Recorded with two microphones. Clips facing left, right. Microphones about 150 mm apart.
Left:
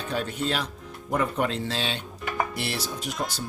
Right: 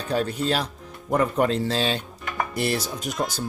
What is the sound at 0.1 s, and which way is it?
Speech, 40° right (ahead or behind).